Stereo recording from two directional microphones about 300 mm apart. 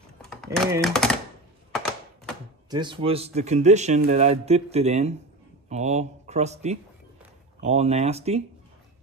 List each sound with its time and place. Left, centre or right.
0.2 s typing: centre
0.8 s speech: centre
1.7 s thunk: centre
2.7 s speech: centre